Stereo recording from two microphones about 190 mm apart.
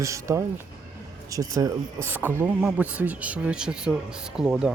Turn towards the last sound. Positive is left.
turn(degrees=-5)  # may be behind; listen again after turning